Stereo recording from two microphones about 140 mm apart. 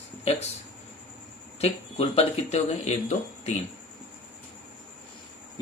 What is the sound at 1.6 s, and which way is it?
Speech, 45° left (ahead or behind).